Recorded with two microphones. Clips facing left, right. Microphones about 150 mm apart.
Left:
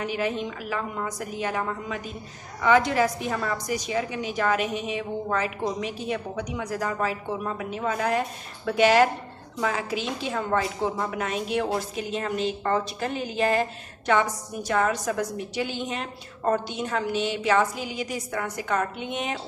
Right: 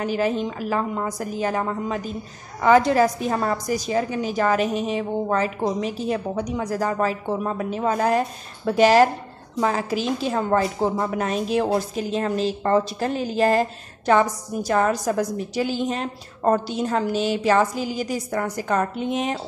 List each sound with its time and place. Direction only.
0.0 s a woman's voice: 40° right (ahead or behind)